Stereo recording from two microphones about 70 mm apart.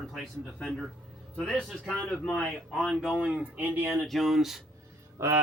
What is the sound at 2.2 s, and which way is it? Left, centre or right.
Speech, centre.